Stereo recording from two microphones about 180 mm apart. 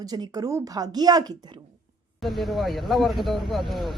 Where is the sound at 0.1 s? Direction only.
20° right (ahead or behind).